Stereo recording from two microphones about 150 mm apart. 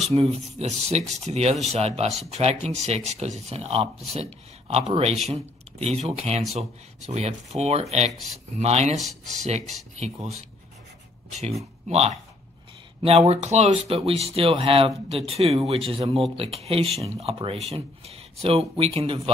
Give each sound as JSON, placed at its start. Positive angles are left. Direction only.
{"t": 0.1, "sound": "speech", "side_deg": -45}
{"t": 8.9, "sound": "speech", "side_deg": 0}
{"t": 9.5, "sound": "speech", "side_deg": -50}
{"t": 11.9, "sound": "speech", "side_deg": -45}